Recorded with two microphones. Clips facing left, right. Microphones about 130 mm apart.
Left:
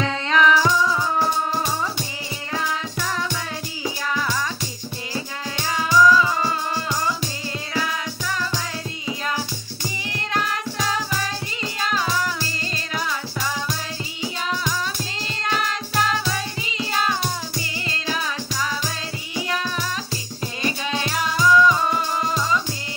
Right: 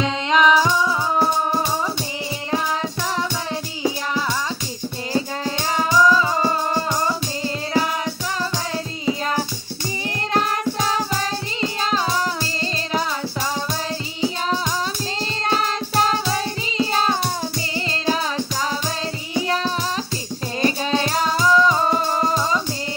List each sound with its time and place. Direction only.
0.0 s music: 20° right (ahead or behind)
5.8 s music: 30° right (ahead or behind)
10.3 s music: 35° right (ahead or behind)
15.4 s music: 35° right (ahead or behind)